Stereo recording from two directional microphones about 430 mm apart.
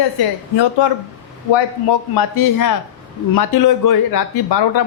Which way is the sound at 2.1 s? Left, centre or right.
Left.